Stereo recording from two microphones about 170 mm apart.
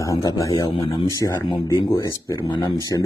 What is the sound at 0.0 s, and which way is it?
Speech, 20° left (ahead or behind).